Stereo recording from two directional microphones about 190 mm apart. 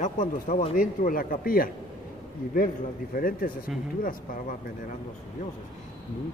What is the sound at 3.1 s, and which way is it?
Speech, 50° left (ahead or behind).